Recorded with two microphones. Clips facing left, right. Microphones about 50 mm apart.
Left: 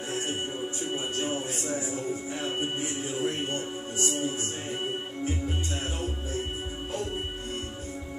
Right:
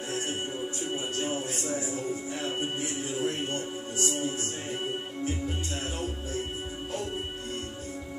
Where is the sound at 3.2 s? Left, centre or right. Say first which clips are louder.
Left 1 dB; centre.